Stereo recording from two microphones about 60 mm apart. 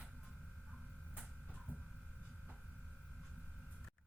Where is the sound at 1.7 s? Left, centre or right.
Left.